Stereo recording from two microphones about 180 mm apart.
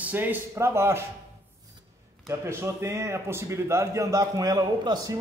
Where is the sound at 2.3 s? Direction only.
15° right (ahead or behind).